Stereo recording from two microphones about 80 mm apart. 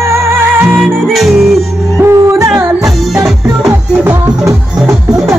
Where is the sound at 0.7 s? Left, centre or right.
Centre.